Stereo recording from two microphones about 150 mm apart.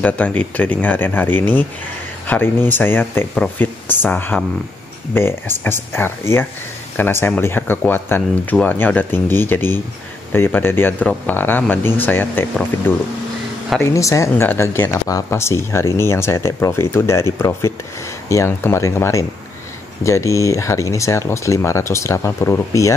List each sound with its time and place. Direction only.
0.0 s speech: 10° left (ahead or behind)